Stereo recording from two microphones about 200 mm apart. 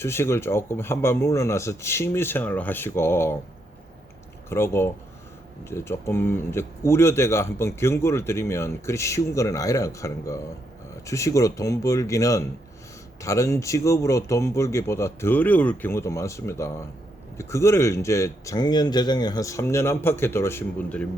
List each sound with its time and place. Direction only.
0.0 s speech: 10° left (ahead or behind)
4.4 s speech: 15° left (ahead or behind)